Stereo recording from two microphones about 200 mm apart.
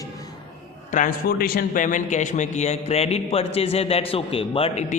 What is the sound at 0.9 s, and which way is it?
A man's voice, 45° left (ahead or behind).